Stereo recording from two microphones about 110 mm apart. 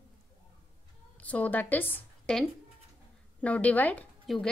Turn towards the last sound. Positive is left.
turn(degrees=0)  # may be behind; listen again after turning